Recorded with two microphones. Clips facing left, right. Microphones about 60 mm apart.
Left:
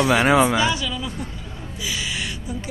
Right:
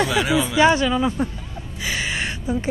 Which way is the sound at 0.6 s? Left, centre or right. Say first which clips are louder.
Right 6 dB; right.